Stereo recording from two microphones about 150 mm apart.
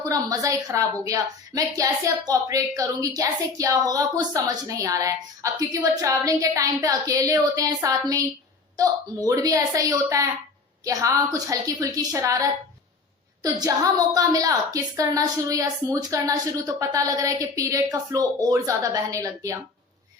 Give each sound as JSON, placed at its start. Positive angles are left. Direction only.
{"t": 0.0, "sound": "a woman's voice", "side_deg": -25}